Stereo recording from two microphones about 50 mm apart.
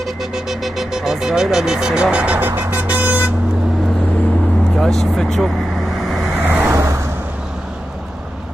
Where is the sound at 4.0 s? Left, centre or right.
Left.